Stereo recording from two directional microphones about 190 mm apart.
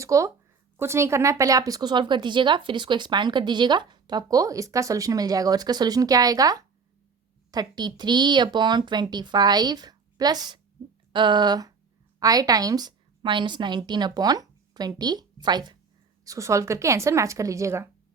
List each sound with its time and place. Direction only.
0.0 s a woman's voice: 15° right (ahead or behind)